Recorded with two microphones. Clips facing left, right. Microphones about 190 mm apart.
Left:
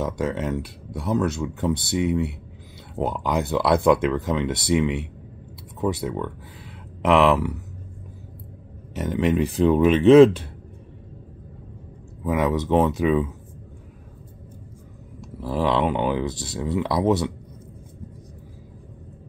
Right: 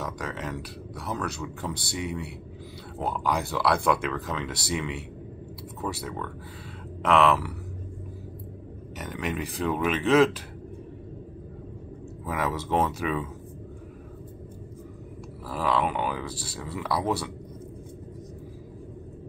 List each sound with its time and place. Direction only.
0.0 s speech: 25° left (ahead or behind)
8.9 s speech: 25° left (ahead or behind)
12.3 s speech: 20° left (ahead or behind)
15.5 s speech: 25° left (ahead or behind)